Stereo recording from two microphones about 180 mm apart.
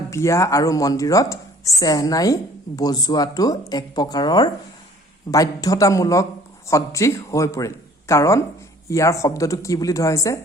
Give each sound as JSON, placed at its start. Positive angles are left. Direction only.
{"t": 0.1, "sound": "speech", "side_deg": 15}